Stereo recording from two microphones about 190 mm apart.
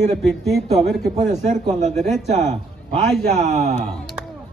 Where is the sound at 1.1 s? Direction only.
35° right (ahead or behind).